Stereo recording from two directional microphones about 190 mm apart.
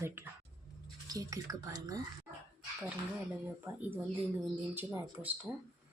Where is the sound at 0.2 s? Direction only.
10° right (ahead or behind).